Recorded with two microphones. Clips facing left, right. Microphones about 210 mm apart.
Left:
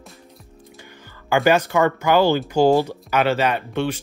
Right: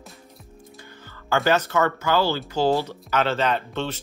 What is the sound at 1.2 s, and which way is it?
Speech, 15° left (ahead or behind).